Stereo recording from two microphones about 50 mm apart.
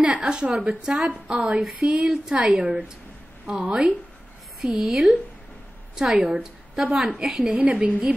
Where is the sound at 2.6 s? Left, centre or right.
Right.